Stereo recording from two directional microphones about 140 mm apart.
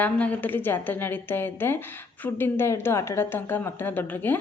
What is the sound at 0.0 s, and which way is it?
A woman's voice, 10° left (ahead or behind).